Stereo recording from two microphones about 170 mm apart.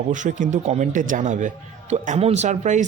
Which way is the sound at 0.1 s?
45° right (ahead or behind).